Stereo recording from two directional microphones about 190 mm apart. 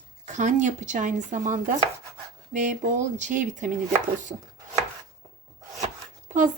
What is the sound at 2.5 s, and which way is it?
Chopping, 40° right (ahead or behind).